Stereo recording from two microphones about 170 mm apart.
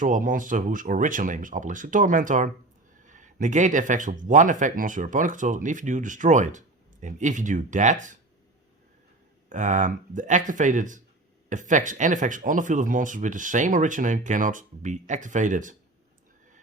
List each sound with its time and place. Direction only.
0.0 s speech: 50° right (ahead or behind)
9.5 s speech: 45° right (ahead or behind)